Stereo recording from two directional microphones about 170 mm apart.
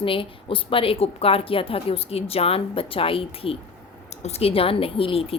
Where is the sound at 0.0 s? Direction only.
30° left (ahead or behind).